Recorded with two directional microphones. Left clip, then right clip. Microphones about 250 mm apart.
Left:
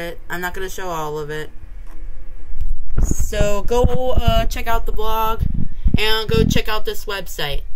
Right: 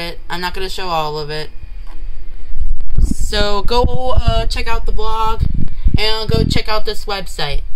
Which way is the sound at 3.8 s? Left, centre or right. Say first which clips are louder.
Right 1 dB; centre.